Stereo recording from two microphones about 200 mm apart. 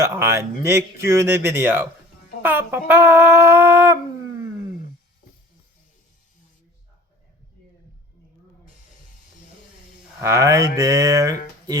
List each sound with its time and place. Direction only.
0.0 s speech: 10° right (ahead or behind)
10.2 s speech: 15° right (ahead or behind)